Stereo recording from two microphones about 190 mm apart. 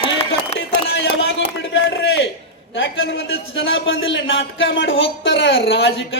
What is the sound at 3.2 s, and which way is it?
A man's voice, 75° left (ahead or behind).